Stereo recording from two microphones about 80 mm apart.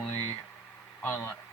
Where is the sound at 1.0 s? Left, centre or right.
Left.